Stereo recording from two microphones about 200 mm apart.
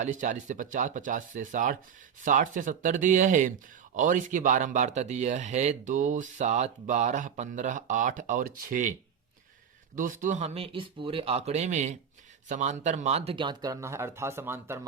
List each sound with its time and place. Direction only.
0.0 s speech: 40° right (ahead or behind); by 14.8 s 10° right (ahead or behind)